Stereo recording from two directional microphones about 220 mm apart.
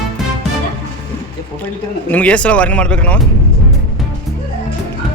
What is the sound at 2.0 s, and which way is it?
A man's voice, 5° left (ahead or behind).